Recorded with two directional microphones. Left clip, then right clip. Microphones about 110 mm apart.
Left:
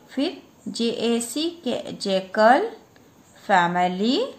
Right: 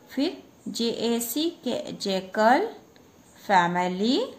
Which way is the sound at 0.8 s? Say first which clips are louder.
Left 3 dB; 45° left (ahead or behind).